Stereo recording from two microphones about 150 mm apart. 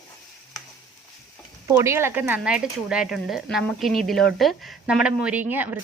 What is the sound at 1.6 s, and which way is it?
Speech, 20° right (ahead or behind).